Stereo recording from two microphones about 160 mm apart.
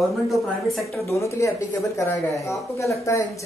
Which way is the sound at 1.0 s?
20° left (ahead or behind).